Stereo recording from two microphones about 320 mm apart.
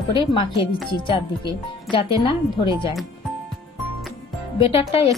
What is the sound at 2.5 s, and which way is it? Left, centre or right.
Speech, centre.